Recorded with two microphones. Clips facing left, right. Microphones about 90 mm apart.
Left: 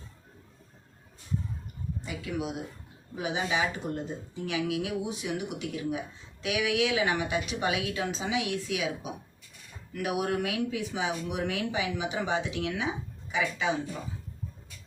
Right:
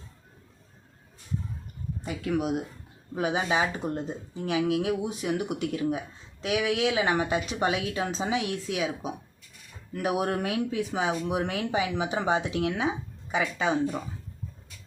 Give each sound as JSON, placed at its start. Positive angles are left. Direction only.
{"t": 2.0, "sound": "a woman's voice", "side_deg": -50}